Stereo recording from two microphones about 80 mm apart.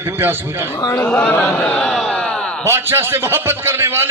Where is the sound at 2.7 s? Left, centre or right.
Right.